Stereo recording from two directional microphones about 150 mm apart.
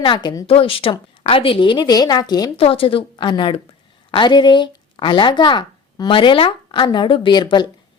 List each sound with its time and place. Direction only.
0.0 s speech: 30° left (ahead or behind)
0.4 s a woman's voice: 40° left (ahead or behind)
2.6 s a woman's voice: 40° left (ahead or behind)